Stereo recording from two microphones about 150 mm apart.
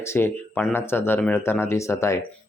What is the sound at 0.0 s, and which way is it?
Speech, 15° left (ahead or behind).